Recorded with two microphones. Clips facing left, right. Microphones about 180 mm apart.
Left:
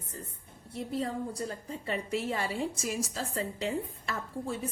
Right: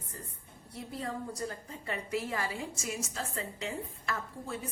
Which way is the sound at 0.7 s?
25° left (ahead or behind).